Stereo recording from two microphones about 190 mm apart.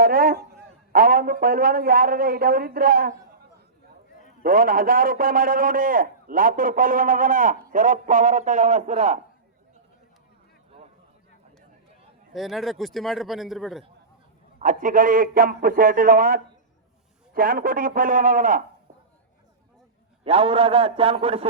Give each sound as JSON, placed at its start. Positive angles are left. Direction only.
{"t": 0.0, "sound": "a man's voice", "side_deg": -50}
{"t": 4.4, "sound": "a man's voice", "side_deg": -50}
{"t": 12.3, "sound": "a man's voice", "side_deg": 0}
{"t": 14.6, "sound": "a man's voice", "side_deg": -45}
{"t": 20.2, "sound": "a man's voice", "side_deg": -30}